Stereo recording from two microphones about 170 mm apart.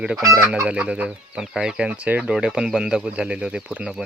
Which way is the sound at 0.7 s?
5° right (ahead or behind).